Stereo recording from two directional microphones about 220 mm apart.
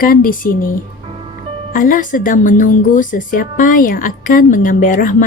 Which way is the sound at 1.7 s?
40° left (ahead or behind).